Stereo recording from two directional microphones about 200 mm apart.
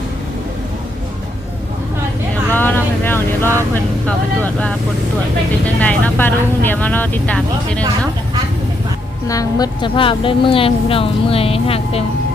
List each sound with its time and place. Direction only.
2.5 s vehicle: 10° left (ahead or behind)
4.0 s speech: 10° left (ahead or behind)
9.2 s a woman's voice: 15° left (ahead or behind)